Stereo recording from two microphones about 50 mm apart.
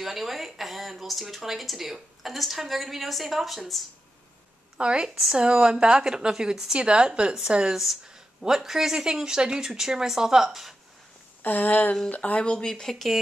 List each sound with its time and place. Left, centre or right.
0.0 s speech: centre
4.7 s a woman's voice: centre
11.4 s speech: left
12.6 s speech: centre